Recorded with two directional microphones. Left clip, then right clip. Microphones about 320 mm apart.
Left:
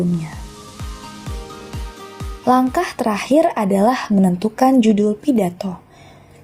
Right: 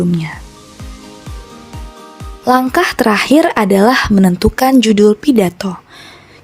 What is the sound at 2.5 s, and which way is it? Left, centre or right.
A woman's voice, right.